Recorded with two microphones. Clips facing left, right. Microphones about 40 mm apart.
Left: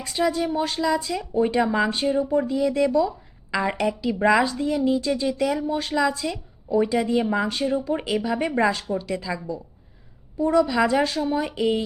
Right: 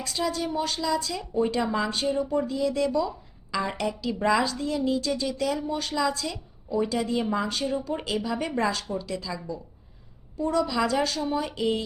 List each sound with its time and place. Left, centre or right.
0.0 s a woman's voice: centre
6.7 s a woman's voice: left
9.0 s a woman's voice: left